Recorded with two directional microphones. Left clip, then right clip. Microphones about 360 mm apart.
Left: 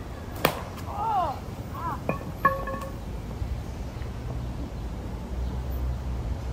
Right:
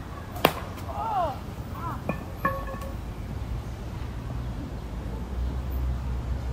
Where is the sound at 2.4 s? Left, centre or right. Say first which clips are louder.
Left 5 dB; centre.